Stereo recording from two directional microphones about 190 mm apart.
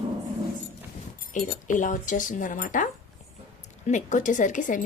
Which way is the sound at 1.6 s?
40° left (ahead or behind).